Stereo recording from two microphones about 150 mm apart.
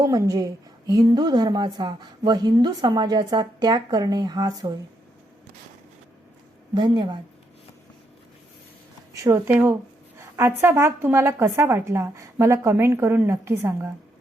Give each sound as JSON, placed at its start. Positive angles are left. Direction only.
{"t": 0.0, "sound": "a woman's voice", "side_deg": -20}
{"t": 6.7, "sound": "a woman's voice", "side_deg": -30}
{"t": 9.1, "sound": "speech", "side_deg": -20}